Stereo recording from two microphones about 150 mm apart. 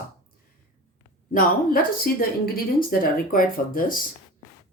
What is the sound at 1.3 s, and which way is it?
Speech, 70° left (ahead or behind).